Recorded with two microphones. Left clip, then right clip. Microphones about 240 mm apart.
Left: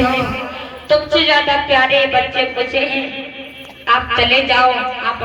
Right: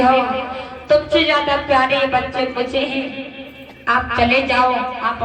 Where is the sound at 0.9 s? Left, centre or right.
Right.